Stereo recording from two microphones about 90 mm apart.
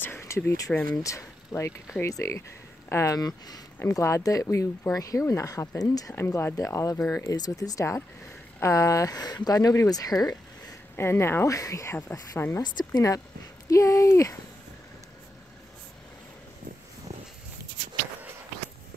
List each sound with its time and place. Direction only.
0.0 s a sound: 25° left (ahead or behind)
0.7 s speech: 10° left (ahead or behind)
1.0 s speech: 35° left (ahead or behind)
3.8 s speech: 35° left (ahead or behind)
6.1 s speech: 25° left (ahead or behind); by 10.8 s 45° left (ahead or behind)
11.0 s speech: 30° left (ahead or behind)
12.7 s speech: 45° left (ahead or behind)